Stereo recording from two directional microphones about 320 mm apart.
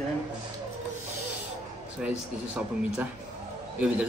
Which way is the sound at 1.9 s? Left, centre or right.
Centre.